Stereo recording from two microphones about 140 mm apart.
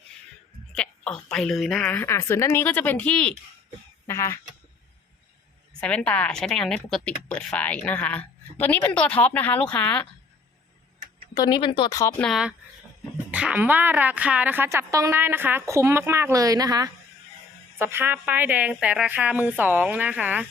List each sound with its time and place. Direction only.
0.7 s a woman's voice: 5° left (ahead or behind)
1.9 s speech: 15° left (ahead or behind)
4.0 s speech: 20° left (ahead or behind)
5.8 s speech: 10° left (ahead or behind)
11.3 s a woman's voice: 30° left (ahead or behind)
11.9 s speech: 25° left (ahead or behind)
12.2 s a woman's voice: 5° right (ahead or behind); by 16.9 s 25° right (ahead or behind)
17.7 s a woman's voice: 15° right (ahead or behind)